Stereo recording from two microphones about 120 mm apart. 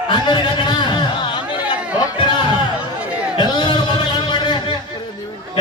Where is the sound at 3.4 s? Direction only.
40° left (ahead or behind).